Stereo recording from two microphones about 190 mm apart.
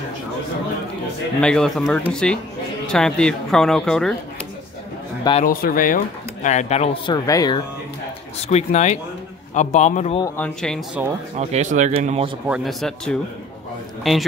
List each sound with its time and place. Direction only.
1.4 s speech: 5° left (ahead or behind)
5.4 s speech: 50° left (ahead or behind); by 7.2 s 30° left (ahead or behind)
7.2 s speech: 20° left (ahead or behind)
8.4 s speech: 35° left (ahead or behind)
10.2 s speech: 10° left (ahead or behind)
11.3 s speech: 35° right (ahead or behind)
12.4 s speech: centre (ahead or behind)